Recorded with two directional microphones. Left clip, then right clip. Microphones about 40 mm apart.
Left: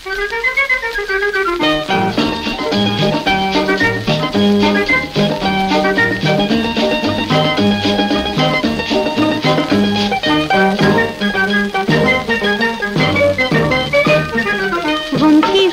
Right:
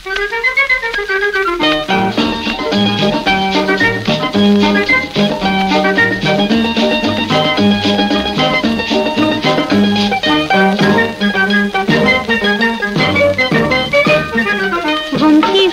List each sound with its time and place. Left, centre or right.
1.6 s music: left
15.1 s music: left